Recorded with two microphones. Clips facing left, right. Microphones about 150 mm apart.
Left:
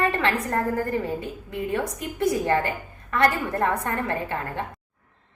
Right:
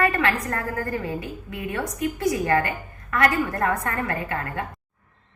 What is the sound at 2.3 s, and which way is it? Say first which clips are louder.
A woman's voice: even; 25° left (ahead or behind).